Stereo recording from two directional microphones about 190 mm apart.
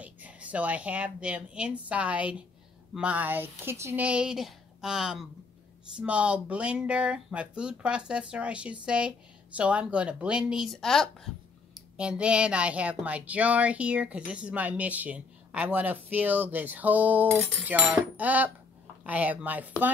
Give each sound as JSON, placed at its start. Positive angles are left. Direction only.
{"t": 0.0, "sound": "a woman's voice", "side_deg": -5}